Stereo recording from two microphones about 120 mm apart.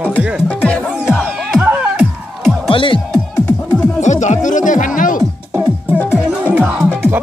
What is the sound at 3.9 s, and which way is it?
Speech, 90° left.